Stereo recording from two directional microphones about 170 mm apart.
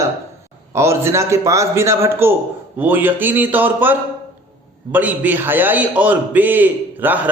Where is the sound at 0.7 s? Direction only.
15° right (ahead or behind).